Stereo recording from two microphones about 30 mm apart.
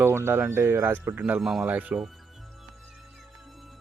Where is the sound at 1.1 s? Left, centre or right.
Right.